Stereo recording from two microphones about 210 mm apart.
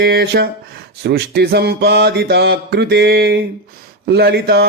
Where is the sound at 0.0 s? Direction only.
50° right (ahead or behind).